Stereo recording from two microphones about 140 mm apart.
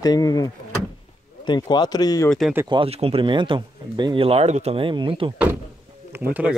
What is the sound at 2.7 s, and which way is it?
Speech, 40° right (ahead or behind).